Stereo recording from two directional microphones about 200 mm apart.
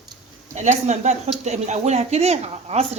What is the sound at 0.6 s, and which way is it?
Speech, 35° right (ahead or behind).